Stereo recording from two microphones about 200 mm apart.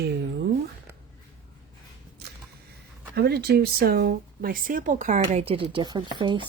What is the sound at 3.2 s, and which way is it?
Speech, 55° right (ahead or behind).